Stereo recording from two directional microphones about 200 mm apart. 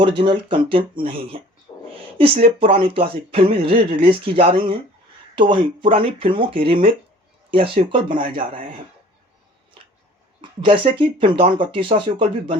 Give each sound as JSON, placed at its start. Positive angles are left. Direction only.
{"t": 0.2, "sound": "speech", "side_deg": -25}
{"t": 1.7, "sound": "a sound", "side_deg": 25}
{"t": 2.1, "sound": "speech", "side_deg": -25}
{"t": 10.6, "sound": "speech", "side_deg": -25}